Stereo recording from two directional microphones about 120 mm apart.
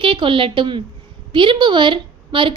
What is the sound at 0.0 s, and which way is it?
A woman's voice, 45° right (ahead or behind).